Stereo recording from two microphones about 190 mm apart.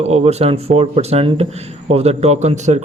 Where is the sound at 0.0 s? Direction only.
35° right (ahead or behind).